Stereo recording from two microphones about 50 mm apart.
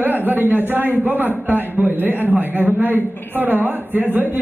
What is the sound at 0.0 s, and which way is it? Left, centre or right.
A man's voice, right.